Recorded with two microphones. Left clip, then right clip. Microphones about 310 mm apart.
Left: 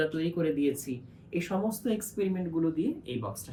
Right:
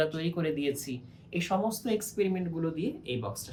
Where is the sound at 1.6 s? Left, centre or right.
Centre.